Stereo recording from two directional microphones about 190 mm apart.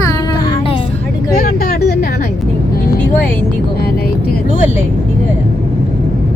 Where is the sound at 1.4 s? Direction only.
50° left (ahead or behind).